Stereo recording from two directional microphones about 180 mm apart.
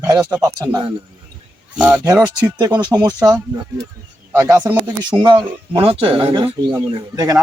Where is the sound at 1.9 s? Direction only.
20° right (ahead or behind).